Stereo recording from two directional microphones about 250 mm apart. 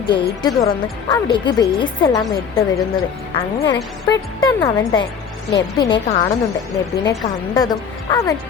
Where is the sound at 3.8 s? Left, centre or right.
Centre.